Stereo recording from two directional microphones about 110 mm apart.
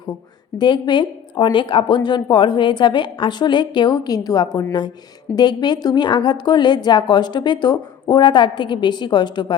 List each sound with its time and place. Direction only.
0.6 s a woman's voice: 45° left (ahead or behind)